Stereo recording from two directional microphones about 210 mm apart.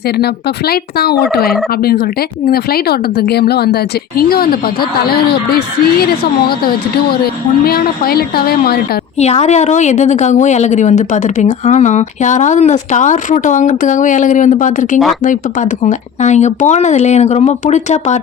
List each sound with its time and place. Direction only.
0.7 s speech: 50° left (ahead or behind)
9.1 s a woman's voice: 30° left (ahead or behind)